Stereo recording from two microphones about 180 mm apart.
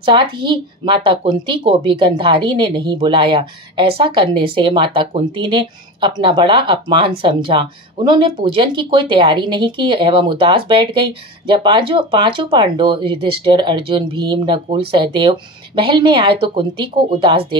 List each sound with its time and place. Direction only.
0.0 s speech: 25° right (ahead or behind)